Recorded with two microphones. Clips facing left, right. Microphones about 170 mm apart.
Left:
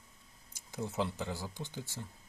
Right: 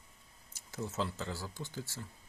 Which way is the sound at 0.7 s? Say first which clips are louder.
Left 2 dB; 15° left (ahead or behind).